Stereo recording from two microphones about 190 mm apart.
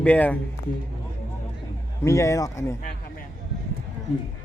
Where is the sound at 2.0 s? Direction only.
15° left (ahead or behind).